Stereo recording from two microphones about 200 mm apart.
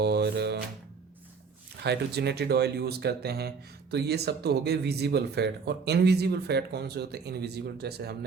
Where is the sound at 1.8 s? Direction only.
55° right (ahead or behind).